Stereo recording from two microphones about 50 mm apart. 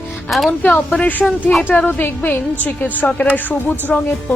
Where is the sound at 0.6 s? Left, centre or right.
Left.